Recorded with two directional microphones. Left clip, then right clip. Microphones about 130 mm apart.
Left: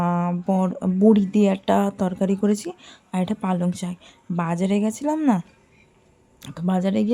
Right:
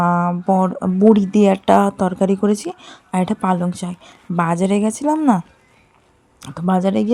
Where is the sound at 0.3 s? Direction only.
Centre (ahead or behind).